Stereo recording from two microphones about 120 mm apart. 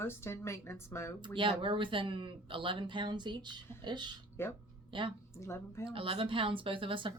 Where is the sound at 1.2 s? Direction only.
40° right (ahead or behind).